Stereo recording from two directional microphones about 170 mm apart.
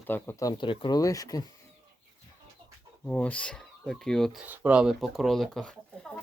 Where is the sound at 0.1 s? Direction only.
15° left (ahead or behind).